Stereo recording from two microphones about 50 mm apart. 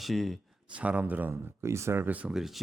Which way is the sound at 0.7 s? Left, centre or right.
Right.